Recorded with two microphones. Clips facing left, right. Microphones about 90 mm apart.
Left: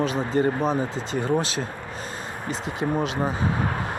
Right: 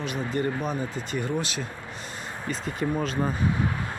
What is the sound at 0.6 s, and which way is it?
Speech, 30° left (ahead or behind).